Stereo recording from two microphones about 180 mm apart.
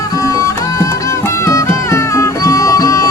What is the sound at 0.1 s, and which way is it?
Music, 20° left (ahead or behind).